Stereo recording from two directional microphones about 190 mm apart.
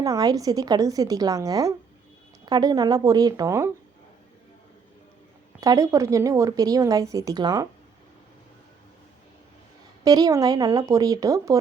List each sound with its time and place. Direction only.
0.0 s a woman's voice: 20° right (ahead or behind)
5.5 s speech: 20° right (ahead or behind)
10.0 s a woman's voice: 20° right (ahead or behind)